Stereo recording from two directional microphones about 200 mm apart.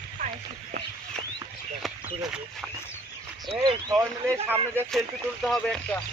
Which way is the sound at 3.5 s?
20° right (ahead or behind).